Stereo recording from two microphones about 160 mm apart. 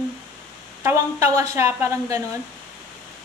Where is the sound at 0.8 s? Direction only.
20° right (ahead or behind).